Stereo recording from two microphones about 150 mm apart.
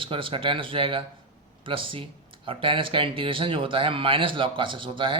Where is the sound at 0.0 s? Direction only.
35° right (ahead or behind).